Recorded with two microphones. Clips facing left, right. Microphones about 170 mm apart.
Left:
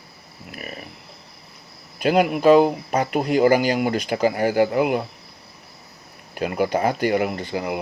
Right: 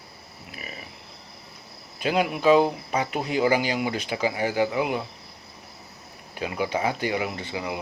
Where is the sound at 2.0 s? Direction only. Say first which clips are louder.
Left 6 dB; 55° left (ahead or behind).